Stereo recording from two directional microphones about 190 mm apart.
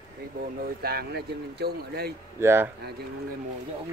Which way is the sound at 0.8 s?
55° right (ahead or behind).